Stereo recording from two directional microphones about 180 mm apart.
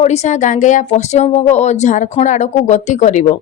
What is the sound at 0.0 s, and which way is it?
A woman's voice, 40° left (ahead or behind).